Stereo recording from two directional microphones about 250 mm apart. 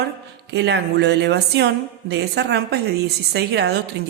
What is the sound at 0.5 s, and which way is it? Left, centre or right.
A woman's voice, right.